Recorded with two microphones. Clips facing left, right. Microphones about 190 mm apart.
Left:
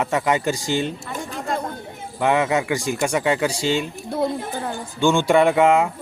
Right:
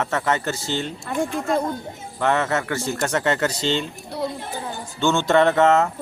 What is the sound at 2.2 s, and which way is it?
Speech, 10° left (ahead or behind).